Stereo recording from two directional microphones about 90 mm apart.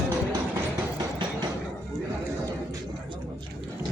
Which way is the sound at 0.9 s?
55° right (ahead or behind).